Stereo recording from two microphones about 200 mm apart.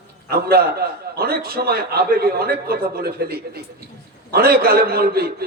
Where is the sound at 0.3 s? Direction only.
50° right (ahead or behind).